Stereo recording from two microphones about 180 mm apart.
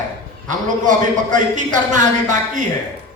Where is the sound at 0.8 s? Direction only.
45° right (ahead or behind).